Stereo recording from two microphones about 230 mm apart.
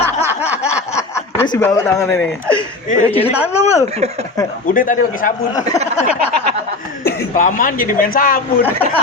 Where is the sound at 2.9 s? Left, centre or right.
Left.